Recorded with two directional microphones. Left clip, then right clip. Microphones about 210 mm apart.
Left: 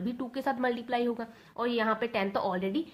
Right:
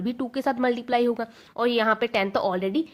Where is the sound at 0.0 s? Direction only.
45° right (ahead or behind).